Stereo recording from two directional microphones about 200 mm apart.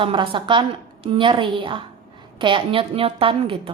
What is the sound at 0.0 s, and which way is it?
A woman's voice, 25° right (ahead or behind).